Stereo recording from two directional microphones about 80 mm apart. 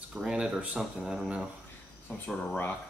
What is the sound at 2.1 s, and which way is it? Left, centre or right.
Speech, centre.